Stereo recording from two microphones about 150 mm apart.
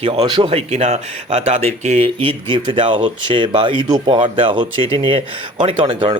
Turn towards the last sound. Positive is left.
turn(degrees=-35)  # may be behind; listen again after turning